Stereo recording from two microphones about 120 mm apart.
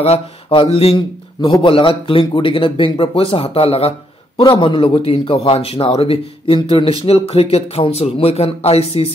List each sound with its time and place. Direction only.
0.0 s a man's voice: 50° left (ahead or behind)
4.4 s a man's voice: 45° left (ahead or behind); by 9.1 s 60° left (ahead or behind)